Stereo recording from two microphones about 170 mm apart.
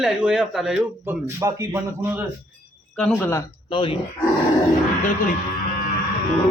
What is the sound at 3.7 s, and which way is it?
Speech, 30° left (ahead or behind).